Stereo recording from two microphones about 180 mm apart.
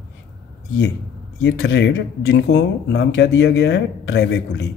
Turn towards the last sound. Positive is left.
turn(degrees=75)  # may be behind; listen again after turning